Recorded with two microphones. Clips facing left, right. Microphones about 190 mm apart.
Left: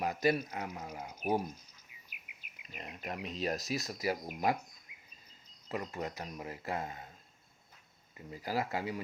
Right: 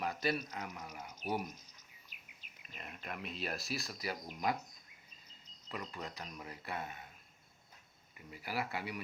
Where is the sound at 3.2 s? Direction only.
40° left (ahead or behind).